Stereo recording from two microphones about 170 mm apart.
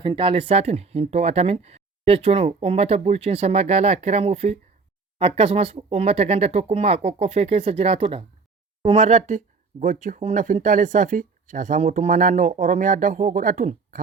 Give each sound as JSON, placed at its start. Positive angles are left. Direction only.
{"t": 0.0, "sound": "speech", "side_deg": -30}